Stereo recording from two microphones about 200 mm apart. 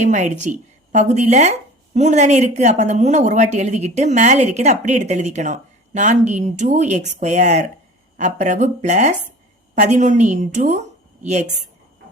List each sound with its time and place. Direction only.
0.0 s speech: 40° right (ahead or behind)